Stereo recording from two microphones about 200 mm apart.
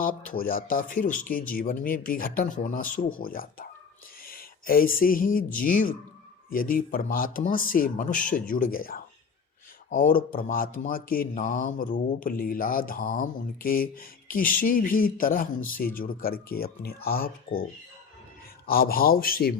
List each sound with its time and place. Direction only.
0.0 s speech: 45° left (ahead or behind)